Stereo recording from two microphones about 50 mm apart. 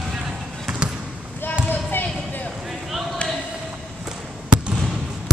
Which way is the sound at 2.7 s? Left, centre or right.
Centre.